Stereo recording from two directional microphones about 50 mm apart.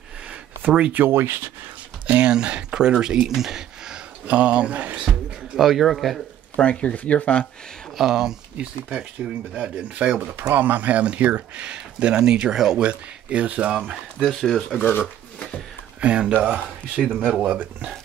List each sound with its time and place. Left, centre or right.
0.6 s a sound: right
0.9 s speech: right
2.0 s speech: right
4.3 s speech: right
5.1 s speech: centre
6.5 s speech: left
8.0 s speech: centre
8.5 s speech: right
10.3 s speech: right; by 12.8 s centre
12.8 s speech: right
14.2 s speech: centre
14.9 s speech: left
16.1 s speech: right